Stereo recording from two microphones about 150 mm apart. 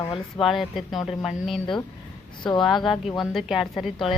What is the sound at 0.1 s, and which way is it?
Speech, centre (ahead or behind).